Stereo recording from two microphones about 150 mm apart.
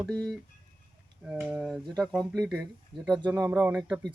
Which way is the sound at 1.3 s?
10° right (ahead or behind).